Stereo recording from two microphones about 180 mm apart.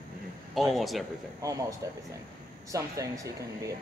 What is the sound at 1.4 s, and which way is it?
Speech, 20° right (ahead or behind).